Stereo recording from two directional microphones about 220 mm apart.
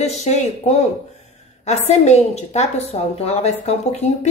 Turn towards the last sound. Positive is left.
turn(degrees=30)  # may be behind; listen again after turning